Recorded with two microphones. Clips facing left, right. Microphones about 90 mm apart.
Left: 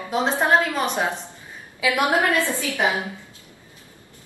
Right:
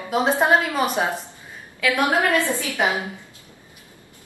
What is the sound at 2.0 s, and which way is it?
Speech, 20° left (ahead or behind).